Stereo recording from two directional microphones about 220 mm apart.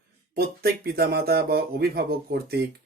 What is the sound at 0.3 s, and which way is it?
Speech, 45° right (ahead or behind).